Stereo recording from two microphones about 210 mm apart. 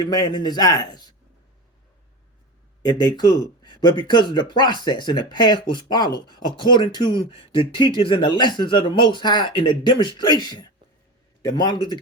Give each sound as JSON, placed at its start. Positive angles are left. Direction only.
{"t": 0.0, "sound": "a man's voice", "side_deg": 20}
{"t": 2.8, "sound": "a man's voice", "side_deg": 20}